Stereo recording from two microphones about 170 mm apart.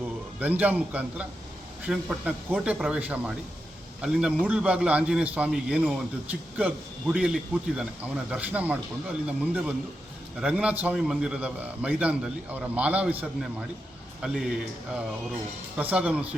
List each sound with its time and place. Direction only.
0.3 s a man's voice: 10° right (ahead or behind)